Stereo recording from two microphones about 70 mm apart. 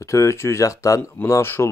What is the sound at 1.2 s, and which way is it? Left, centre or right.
Speech, left.